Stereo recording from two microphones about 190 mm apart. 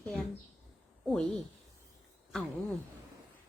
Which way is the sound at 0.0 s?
5° left (ahead or behind).